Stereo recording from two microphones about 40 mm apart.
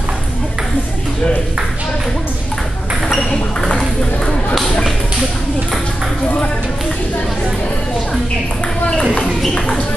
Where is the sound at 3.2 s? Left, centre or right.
Centre.